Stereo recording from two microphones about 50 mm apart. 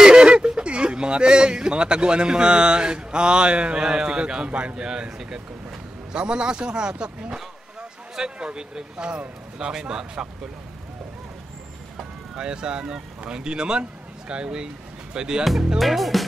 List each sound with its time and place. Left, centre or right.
0.0 s speech: centre
12.4 s speech: centre
15.8 s speech: centre